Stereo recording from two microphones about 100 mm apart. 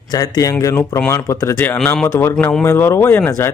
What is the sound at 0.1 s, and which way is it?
Speech, 40° left (ahead or behind).